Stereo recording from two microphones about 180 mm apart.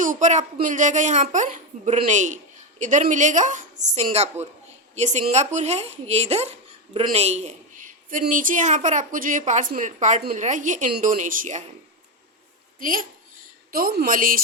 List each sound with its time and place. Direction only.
0.0 s a woman's voice: 45° right (ahead or behind)
12.8 s a woman's voice: 50° right (ahead or behind)